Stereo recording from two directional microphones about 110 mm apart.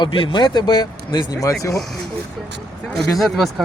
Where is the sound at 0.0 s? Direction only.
50° left (ahead or behind); by 1.5 s 35° left (ahead or behind).